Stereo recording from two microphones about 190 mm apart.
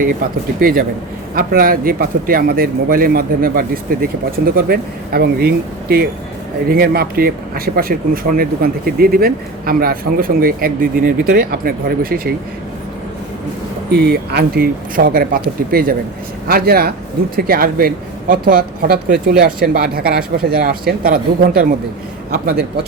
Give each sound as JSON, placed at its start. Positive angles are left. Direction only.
{"t": 0.6, "sound": "speech", "side_deg": -50}
{"t": 13.9, "sound": "a man's voice", "side_deg": -60}